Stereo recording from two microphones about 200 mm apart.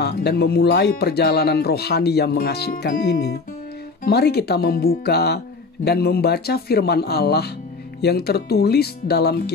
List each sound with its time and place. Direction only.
0.0 s speech: 55° left (ahead or behind)